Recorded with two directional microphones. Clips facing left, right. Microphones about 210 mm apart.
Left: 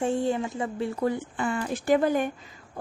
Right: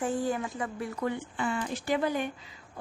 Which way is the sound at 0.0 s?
25° left (ahead or behind).